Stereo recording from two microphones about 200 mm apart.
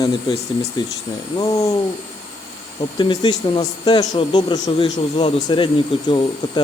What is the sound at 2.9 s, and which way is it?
A man's voice, 20° left (ahead or behind).